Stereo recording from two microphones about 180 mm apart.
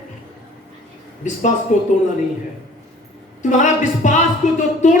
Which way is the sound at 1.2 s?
45° left (ahead or behind).